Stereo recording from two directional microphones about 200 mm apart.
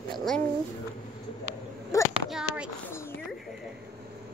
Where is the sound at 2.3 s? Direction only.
5° right (ahead or behind).